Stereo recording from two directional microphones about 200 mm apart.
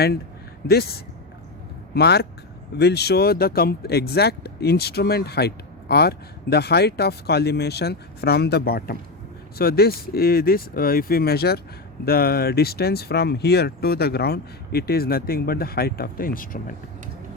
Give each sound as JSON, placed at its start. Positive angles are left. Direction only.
{"t": 0.7, "sound": "speech", "side_deg": 50}